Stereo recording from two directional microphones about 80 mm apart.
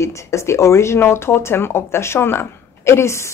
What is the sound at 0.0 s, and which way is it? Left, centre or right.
Speech, left.